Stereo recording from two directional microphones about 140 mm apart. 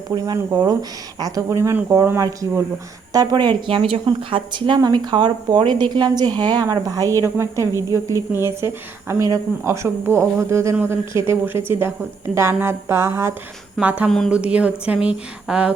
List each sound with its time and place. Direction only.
0.3 s a woman's voice: 20° right (ahead or behind)
14.1 s a sound: centre (ahead or behind)
14.3 s a woman's voice: 10° right (ahead or behind)